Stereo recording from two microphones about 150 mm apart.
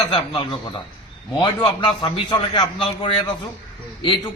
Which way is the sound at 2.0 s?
35° left (ahead or behind).